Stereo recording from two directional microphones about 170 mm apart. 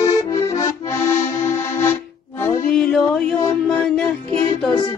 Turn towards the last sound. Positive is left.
turn(degrees=5)  # may be behind; listen again after turning